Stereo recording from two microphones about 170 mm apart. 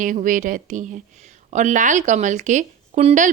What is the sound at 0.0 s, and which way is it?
A woman's voice, 50° right (ahead or behind).